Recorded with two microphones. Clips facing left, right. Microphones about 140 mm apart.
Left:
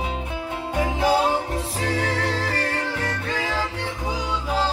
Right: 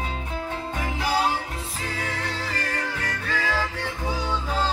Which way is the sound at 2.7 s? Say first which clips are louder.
Left 3 dB; 25° left (ahead or behind).